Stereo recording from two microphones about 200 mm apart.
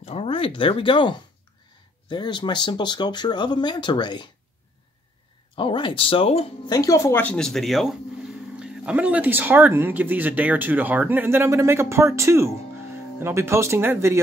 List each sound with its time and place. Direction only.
0.0 s speech: 30° left (ahead or behind)
5.6 s speech: 25° left (ahead or behind); by 14.2 s 15° right (ahead or behind)